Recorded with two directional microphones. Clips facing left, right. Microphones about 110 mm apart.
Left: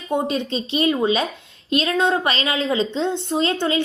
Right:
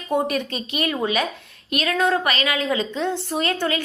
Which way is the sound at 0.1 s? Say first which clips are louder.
Left 1 dB; 25° left (ahead or behind).